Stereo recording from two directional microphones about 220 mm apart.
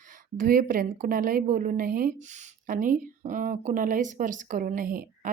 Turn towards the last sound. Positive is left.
turn(degrees=-40)  # may be behind; listen again after turning